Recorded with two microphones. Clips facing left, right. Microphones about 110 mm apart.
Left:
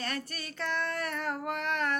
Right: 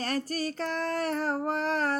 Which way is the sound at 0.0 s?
35° right (ahead or behind).